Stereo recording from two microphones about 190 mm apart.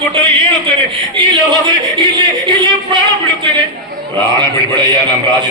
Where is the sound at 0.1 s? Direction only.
25° right (ahead or behind).